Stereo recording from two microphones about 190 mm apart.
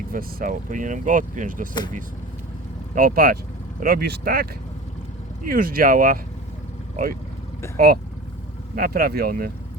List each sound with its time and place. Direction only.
0.1 s speech: 50° right (ahead or behind)
2.9 s speech: 50° right (ahead or behind)
5.5 s speech: 50° right (ahead or behind)
8.7 s speech: 55° right (ahead or behind)